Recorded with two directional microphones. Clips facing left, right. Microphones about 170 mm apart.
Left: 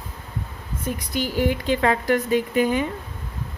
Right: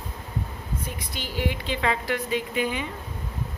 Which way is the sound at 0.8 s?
45° left (ahead or behind).